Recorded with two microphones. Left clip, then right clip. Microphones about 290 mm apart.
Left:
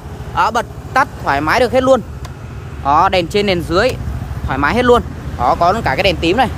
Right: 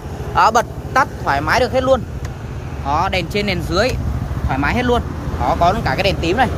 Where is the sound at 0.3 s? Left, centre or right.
Centre.